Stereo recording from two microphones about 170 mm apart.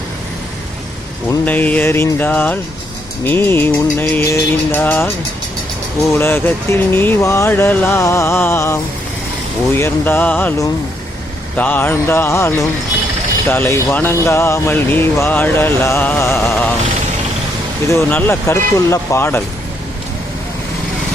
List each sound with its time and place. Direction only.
1.3 s music: 10° left (ahead or behind)
6.1 s music: 15° left (ahead or behind)
17.8 s music: 15° left (ahead or behind)